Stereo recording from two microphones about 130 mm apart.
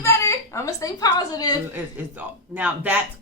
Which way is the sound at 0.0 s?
20° left (ahead or behind).